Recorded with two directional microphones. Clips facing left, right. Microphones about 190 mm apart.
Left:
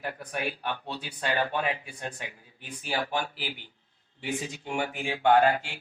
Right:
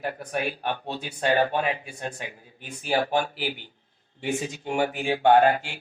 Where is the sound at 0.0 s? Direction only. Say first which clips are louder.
Right 4 dB; 35° right (ahead or behind).